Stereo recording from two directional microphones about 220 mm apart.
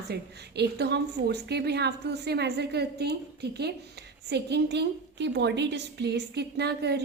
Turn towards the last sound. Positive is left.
turn(degrees=-50)  # may be behind; listen again after turning